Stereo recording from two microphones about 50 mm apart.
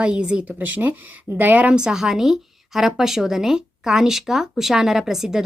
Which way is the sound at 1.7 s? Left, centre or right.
Centre.